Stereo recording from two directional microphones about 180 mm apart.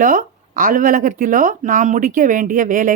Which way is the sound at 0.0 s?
50° right (ahead or behind).